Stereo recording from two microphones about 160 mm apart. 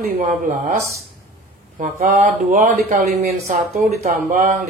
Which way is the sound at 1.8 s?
60° right (ahead or behind).